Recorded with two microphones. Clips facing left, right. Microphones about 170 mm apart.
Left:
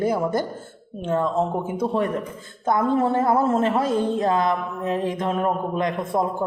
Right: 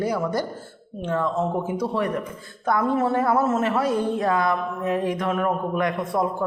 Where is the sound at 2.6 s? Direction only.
25° left (ahead or behind).